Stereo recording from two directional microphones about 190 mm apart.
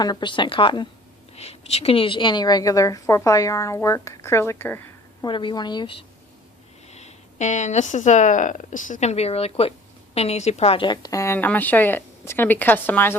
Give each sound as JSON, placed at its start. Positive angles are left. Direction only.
{"t": 0.0, "sound": "a woman's voice", "side_deg": 25}
{"t": 5.2, "sound": "a woman's voice", "side_deg": 25}
{"t": 6.9, "sound": "a woman's voice", "side_deg": 35}